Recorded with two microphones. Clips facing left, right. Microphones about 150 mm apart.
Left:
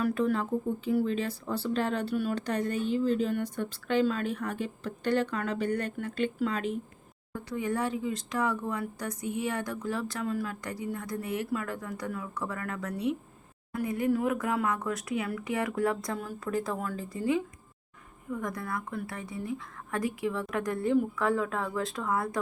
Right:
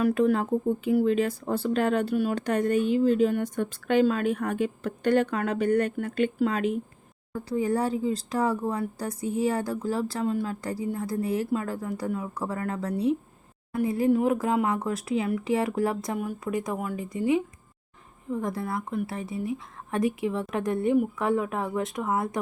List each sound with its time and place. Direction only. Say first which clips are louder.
0.0 s speech: right 5 dB; 50° right (ahead or behind)
7.5 s speech: right 5 dB; 35° right (ahead or behind)